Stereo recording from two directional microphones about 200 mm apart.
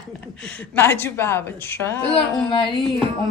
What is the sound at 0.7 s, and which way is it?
A woman's voice, 10° left (ahead or behind).